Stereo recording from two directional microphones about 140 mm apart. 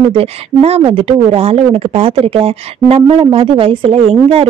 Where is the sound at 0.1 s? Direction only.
45° right (ahead or behind).